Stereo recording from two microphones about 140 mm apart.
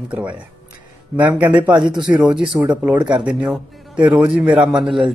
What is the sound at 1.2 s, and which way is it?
A woman's voice, 10° right (ahead or behind).